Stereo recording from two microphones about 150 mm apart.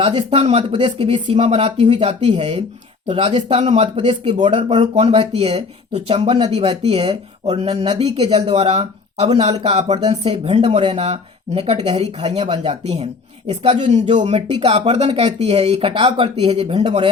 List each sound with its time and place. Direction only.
0.1 s speech: 35° right (ahead or behind)
3.9 s speech: 35° right (ahead or behind)
14.1 s speech: 50° right (ahead or behind)